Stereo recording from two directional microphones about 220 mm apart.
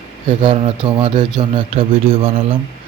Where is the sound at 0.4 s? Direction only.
25° right (ahead or behind).